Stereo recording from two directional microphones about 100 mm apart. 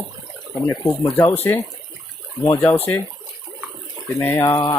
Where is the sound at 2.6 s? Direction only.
20° left (ahead or behind).